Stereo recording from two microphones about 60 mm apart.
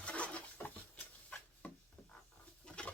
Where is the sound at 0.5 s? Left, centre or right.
Left.